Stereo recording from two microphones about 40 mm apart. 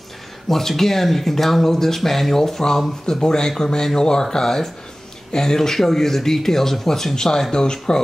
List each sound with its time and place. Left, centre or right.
0.5 s speech: centre